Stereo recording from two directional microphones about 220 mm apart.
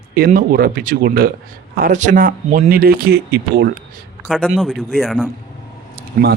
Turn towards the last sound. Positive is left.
turn(degrees=-40)  # may be behind; listen again after turning